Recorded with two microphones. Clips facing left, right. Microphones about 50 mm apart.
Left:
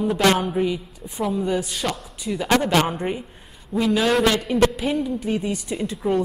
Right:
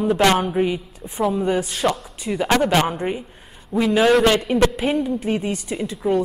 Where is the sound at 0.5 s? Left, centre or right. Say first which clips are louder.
Right 2 dB; right.